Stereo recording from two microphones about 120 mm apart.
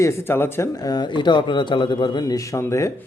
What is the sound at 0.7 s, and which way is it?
Speech, 35° left (ahead or behind).